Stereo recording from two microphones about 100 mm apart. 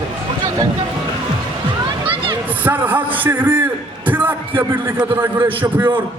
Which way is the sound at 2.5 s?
15° right (ahead or behind).